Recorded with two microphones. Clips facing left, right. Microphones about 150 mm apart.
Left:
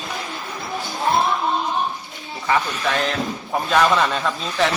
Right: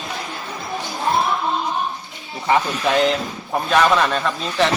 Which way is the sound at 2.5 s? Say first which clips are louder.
Right 3 dB; 20° right (ahead or behind).